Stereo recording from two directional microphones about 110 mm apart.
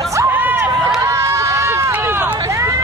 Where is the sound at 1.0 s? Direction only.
25° right (ahead or behind).